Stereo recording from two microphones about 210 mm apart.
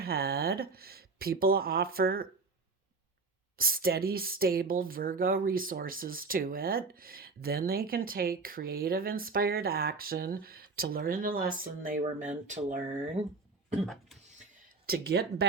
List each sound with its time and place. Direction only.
0.0 s speech: 45° right (ahead or behind)
3.6 s speech: 45° right (ahead or behind)
13.8 s speech: centre (ahead or behind)
14.8 s speech: 50° right (ahead or behind)